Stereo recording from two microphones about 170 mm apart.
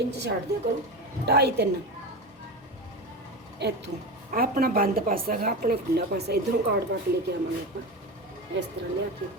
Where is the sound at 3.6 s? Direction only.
85° right.